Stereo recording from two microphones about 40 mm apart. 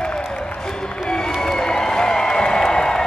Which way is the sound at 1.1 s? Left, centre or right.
Centre.